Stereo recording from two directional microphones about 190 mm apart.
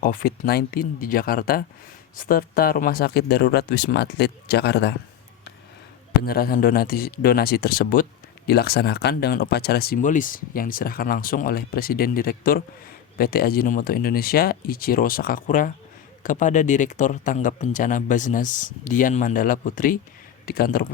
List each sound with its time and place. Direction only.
0.0 s speech: 50° left (ahead or behind)
6.2 s speech: 50° left (ahead or behind)